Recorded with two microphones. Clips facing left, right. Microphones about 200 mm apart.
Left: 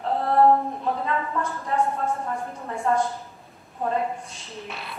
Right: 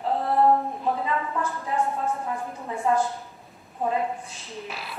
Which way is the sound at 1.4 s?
Centre (ahead or behind).